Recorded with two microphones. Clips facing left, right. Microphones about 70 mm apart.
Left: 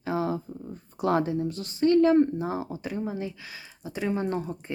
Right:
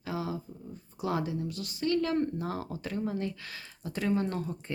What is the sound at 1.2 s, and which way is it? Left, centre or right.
Speech, left.